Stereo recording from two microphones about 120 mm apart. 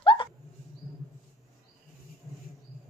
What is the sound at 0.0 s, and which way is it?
Hiccup, 45° left (ahead or behind).